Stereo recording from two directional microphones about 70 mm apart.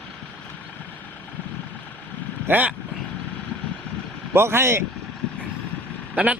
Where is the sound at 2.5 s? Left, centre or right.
Right.